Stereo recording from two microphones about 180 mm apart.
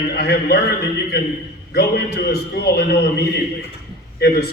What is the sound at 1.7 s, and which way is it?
A man's voice, 60° left (ahead or behind).